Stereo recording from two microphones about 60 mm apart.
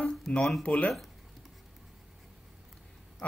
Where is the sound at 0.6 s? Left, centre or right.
Left.